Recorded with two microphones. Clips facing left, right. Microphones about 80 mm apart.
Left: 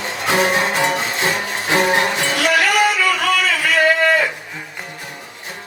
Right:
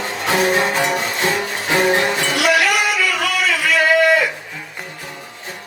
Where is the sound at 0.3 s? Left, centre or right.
Left.